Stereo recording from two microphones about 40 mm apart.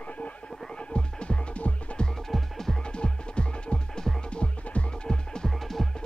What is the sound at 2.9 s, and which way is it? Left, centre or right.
Music, left.